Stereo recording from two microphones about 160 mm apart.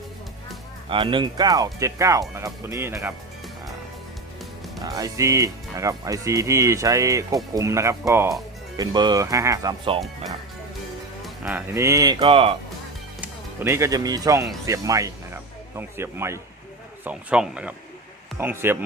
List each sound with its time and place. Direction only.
0.9 s speech: 30° right (ahead or behind)
4.8 s speech: 20° right (ahead or behind)
11.4 s speech: 15° right (ahead or behind)
12.2 s speech: 35° right (ahead or behind)
13.2 s speech: 15° right (ahead or behind)